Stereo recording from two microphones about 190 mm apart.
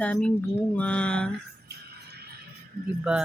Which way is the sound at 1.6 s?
55° right (ahead or behind).